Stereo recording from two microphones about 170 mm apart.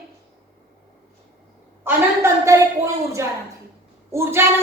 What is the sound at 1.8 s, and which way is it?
A woman's voice, 15° right (ahead or behind).